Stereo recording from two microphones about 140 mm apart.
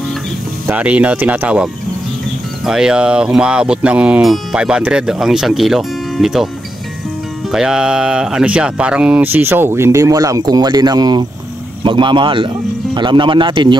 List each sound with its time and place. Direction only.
0.7 s speech: 10° right (ahead or behind)
2.6 s music: 5° right (ahead or behind)
7.5 s speech: 5° right (ahead or behind); by 13.7 s 35° right (ahead or behind)